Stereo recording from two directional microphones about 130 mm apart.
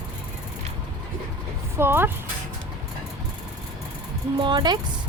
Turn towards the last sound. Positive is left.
turn(degrees=-35)  # may be behind; listen again after turning